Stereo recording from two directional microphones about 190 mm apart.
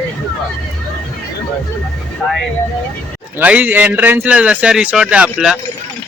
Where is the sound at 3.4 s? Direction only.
10° right (ahead or behind).